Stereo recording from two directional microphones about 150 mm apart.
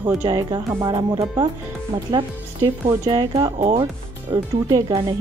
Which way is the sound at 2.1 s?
35° right (ahead or behind).